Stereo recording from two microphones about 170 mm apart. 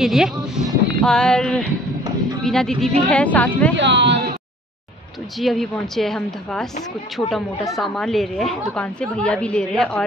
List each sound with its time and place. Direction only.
0.0 s a woman's voice: 5° right (ahead or behind)
3.7 s speech: 90° right
5.4 s a woman's voice: centre (ahead or behind)